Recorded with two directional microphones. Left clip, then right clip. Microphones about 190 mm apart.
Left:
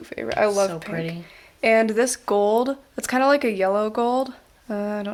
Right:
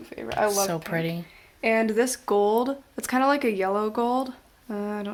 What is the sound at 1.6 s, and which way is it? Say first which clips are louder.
Speech: left 4 dB; 30° left (ahead or behind).